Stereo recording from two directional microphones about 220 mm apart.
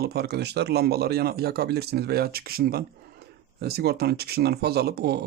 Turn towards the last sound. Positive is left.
turn(degrees=-45)  # may be behind; listen again after turning